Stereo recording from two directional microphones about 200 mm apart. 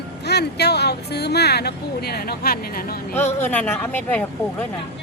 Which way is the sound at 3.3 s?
10° left (ahead or behind).